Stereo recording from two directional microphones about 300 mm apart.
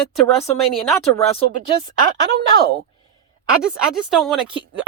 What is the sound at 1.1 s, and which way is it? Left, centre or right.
Speech, centre.